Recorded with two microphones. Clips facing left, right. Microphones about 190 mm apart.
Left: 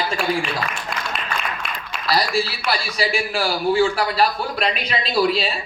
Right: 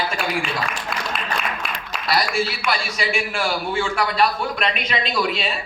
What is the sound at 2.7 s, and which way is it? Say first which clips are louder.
A man's voice: left 1 dB; 35° left (ahead or behind).